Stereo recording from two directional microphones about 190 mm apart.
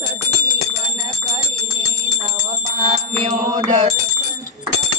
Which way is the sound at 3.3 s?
35° right (ahead or behind).